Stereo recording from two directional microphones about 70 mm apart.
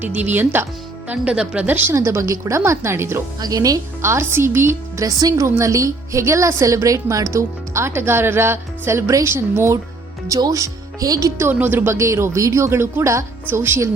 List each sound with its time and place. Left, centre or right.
0.0 s speech: right
1.6 s speech: right
1.9 s a woman's voice: right
3.4 s speech: right
4.0 s a woman's voice: right
5.0 s a woman's voice: right
10.5 s speech: right
11.5 s speech: right
11.9 s a woman's voice: right